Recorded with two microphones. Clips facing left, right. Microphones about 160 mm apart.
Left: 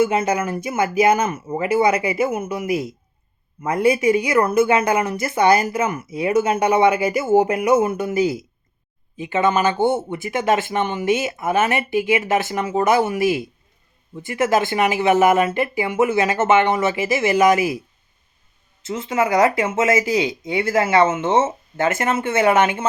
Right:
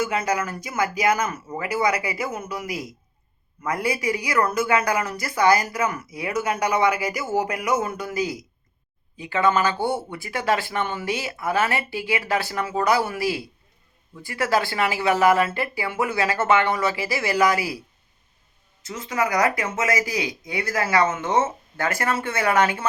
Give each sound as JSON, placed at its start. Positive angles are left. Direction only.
{"t": 0.0, "sound": "speech", "side_deg": 25}
{"t": 18.8, "sound": "speech", "side_deg": 25}